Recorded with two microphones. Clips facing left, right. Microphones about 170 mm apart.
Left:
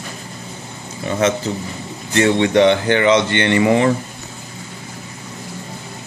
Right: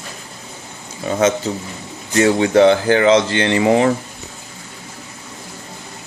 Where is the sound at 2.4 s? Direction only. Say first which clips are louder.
Right 2 dB; 35° right (ahead or behind).